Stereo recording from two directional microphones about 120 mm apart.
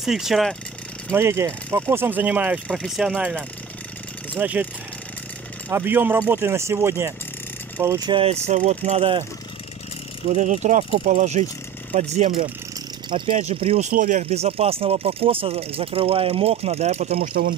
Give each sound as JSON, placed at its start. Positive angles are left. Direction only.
{"t": 0.0, "sound": "speech", "side_deg": -5}
{"t": 1.1, "sound": "speech", "side_deg": -25}
{"t": 5.7, "sound": "speech", "side_deg": -20}
{"t": 8.1, "sound": "speech", "side_deg": -50}
{"t": 8.5, "sound": "speech", "side_deg": -70}
{"t": 10.3, "sound": "speech", "side_deg": -90}
{"t": 11.9, "sound": "speech", "side_deg": -75}
{"t": 13.4, "sound": "speech", "side_deg": -60}